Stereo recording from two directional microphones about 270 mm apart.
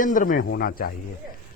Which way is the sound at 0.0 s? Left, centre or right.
Left.